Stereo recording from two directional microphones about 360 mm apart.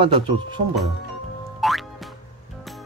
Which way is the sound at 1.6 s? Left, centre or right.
Centre.